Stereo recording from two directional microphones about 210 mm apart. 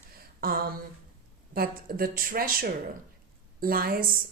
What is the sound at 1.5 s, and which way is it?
A woman's voice, 45° right (ahead or behind).